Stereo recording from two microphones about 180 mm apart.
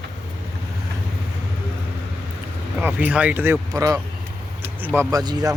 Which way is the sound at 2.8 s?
10° right (ahead or behind).